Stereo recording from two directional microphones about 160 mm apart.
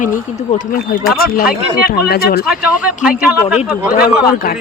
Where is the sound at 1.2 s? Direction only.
65° left (ahead or behind).